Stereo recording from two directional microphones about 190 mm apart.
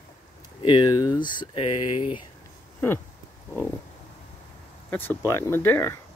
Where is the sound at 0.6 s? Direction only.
25° left (ahead or behind).